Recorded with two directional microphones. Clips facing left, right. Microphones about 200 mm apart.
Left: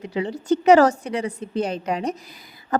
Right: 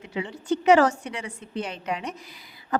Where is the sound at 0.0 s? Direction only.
35° left (ahead or behind).